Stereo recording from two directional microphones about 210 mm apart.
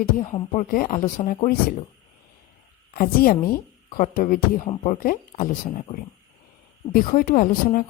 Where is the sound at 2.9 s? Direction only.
45° left (ahead or behind).